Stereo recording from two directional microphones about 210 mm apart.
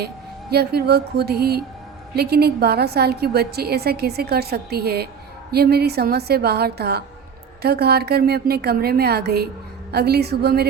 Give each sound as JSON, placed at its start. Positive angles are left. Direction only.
{"t": 0.5, "sound": "a woman's voice", "side_deg": -50}